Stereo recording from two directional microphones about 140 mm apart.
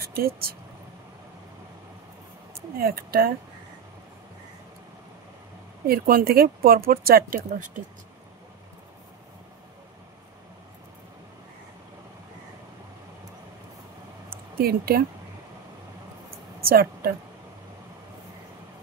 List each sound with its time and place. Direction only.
0.0 s speech: 90° right
2.8 s speech: 90° right
5.9 s speech: 90° right
14.3 s a sound: 90° right
16.6 s speech: 90° right